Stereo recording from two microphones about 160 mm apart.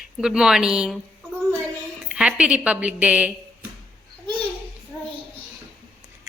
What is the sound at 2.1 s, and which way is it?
A woman's voice, 5° right (ahead or behind).